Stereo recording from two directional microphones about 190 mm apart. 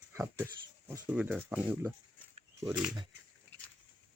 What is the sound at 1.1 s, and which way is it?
Speech, 5° right (ahead or behind).